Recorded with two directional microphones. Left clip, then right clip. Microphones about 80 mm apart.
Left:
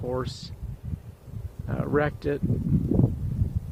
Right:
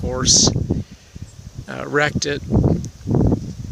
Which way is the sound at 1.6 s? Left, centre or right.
Right.